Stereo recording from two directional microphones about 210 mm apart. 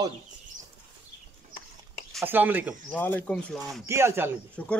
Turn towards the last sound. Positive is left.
turn(degrees=5)  # may be behind; listen again after turning